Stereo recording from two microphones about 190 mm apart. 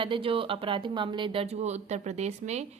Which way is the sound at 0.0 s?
30° right (ahead or behind).